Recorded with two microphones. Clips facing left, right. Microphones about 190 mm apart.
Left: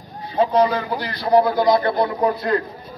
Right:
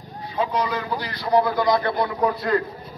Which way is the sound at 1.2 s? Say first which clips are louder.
Left 4 dB; 35° left (ahead or behind).